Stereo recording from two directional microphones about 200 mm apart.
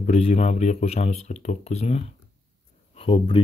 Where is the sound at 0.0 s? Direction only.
35° left (ahead or behind).